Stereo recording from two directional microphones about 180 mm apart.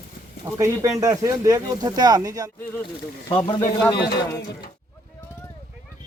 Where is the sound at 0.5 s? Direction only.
20° right (ahead or behind).